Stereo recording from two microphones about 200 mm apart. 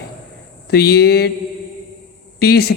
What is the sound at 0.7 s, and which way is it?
Speech, 50° left (ahead or behind).